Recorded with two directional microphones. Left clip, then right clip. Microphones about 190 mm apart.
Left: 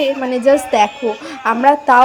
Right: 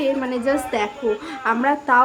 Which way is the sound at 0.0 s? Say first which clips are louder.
Left 6 dB; 30° left (ahead or behind).